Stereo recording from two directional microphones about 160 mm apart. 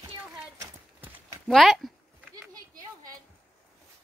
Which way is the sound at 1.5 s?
Centre (ahead or behind).